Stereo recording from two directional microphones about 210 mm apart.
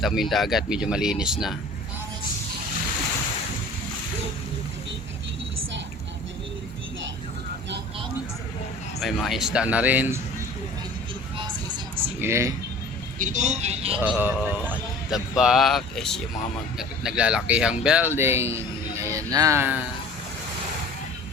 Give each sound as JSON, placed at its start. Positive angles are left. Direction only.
{"t": 0.0, "sound": "speech", "side_deg": 0}
{"t": 9.0, "sound": "speech", "side_deg": 0}
{"t": 12.2, "sound": "speech", "side_deg": -15}
{"t": 13.1, "sound": "speech", "side_deg": -35}
{"t": 14.0, "sound": "speech", "side_deg": -10}